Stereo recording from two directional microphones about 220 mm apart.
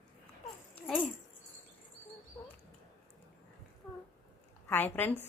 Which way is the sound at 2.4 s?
20° left (ahead or behind).